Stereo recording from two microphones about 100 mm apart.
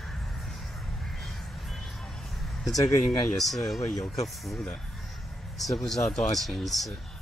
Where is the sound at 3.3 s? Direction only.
Centre (ahead or behind).